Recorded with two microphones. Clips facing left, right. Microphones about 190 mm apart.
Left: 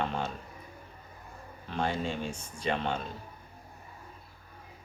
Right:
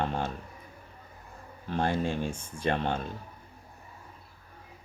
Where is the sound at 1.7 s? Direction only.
50° right (ahead or behind).